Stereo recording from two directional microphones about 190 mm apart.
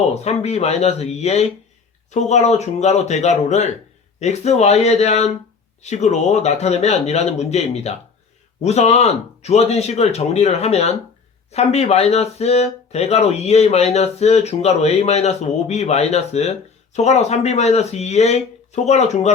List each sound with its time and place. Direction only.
0.1 s speech: 35° left (ahead or behind)